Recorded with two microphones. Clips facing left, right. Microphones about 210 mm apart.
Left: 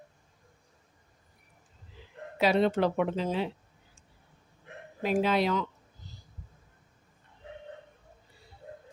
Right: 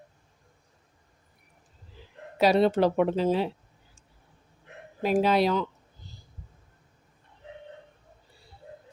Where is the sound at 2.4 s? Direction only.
40° right (ahead or behind).